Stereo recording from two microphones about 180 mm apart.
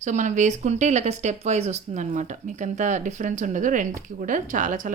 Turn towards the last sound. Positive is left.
turn(degrees=-45)  # may be behind; listen again after turning